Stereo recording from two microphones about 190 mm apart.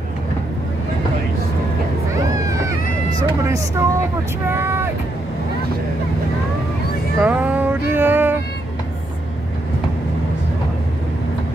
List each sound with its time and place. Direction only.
3.2 s vehicle: 15° right (ahead or behind)
7.2 s cat: 10° right (ahead or behind)